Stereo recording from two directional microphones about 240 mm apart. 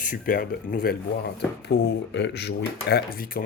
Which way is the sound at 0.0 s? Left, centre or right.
Left.